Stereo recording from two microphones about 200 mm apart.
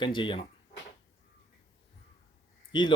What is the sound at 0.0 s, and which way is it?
Speech, 25° left (ahead or behind).